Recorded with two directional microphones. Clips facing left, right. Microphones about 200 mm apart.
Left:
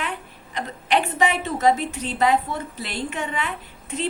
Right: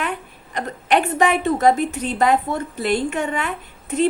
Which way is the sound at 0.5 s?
50° right (ahead or behind).